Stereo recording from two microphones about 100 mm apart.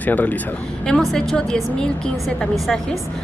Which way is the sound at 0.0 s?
15° left (ahead or behind).